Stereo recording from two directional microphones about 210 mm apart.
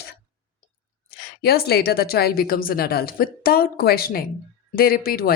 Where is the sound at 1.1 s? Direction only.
50° left (ahead or behind).